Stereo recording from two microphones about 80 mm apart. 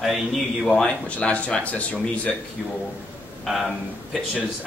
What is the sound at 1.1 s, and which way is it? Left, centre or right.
Speech, centre.